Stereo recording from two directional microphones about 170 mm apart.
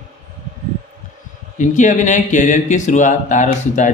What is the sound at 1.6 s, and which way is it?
Speech, 45° left (ahead or behind).